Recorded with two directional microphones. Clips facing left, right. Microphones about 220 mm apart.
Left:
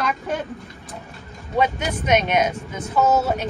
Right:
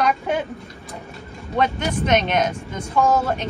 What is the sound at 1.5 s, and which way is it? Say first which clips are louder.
Speech: even; 5° left (ahead or behind).